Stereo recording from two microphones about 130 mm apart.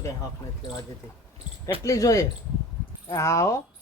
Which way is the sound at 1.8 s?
25° left (ahead or behind).